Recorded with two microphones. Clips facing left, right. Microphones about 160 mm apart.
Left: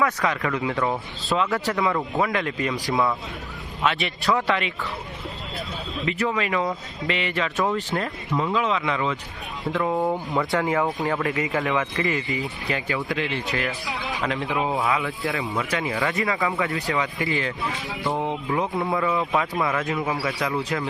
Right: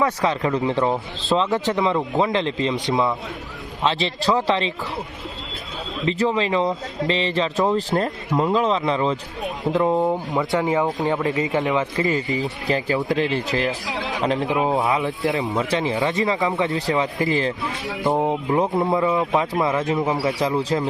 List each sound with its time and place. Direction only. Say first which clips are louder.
0.0 s speech: right 3 dB; 25° right (ahead or behind)
6.1 s speech: right 4 dB; 30° right (ahead or behind)
9.7 s speech: right 4 dB; 20° right (ahead or behind)
18.7 s speech: right 4 dB; 20° right (ahead or behind)